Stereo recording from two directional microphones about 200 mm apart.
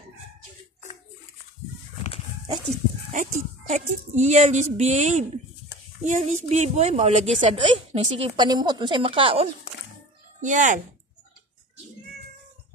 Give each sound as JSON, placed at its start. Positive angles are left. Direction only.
{"t": 3.1, "sound": "a woman's voice", "side_deg": -35}
{"t": 10.4, "sound": "a woman's voice", "side_deg": -40}